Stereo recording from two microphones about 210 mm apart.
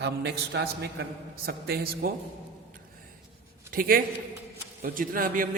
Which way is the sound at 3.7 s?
40° right (ahead or behind).